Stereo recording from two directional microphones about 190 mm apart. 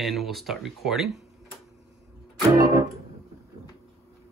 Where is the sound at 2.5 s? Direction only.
20° right (ahead or behind).